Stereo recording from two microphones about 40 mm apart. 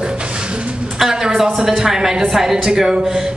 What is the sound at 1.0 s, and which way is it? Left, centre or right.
Speech, centre.